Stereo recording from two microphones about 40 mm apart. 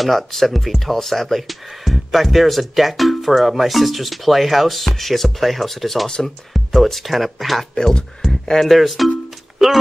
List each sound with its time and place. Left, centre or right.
0.0 s speech: centre
6.0 s speech: centre
6.5 s speech: centre
7.7 s speech: centre